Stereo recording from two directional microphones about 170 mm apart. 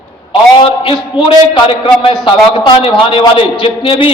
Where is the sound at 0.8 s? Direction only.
30° left (ahead or behind).